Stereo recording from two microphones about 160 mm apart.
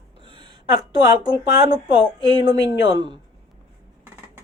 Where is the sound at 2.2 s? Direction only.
25° right (ahead or behind).